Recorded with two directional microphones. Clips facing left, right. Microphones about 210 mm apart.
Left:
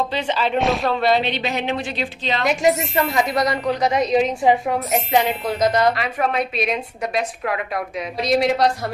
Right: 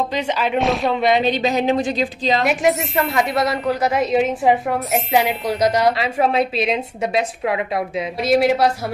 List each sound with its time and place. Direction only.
0.1 s speech: 10° right (ahead or behind)
0.9 s speech: 15° right (ahead or behind)
1.2 s a woman's voice: 40° right (ahead or behind)
2.4 s a woman's voice: centre (ahead or behind)
5.4 s speech: 10° right (ahead or behind)
5.9 s a woman's voice: 30° right (ahead or behind)
8.2 s a woman's voice: 5° right (ahead or behind)